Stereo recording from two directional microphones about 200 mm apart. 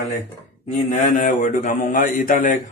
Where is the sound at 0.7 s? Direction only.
35° left (ahead or behind).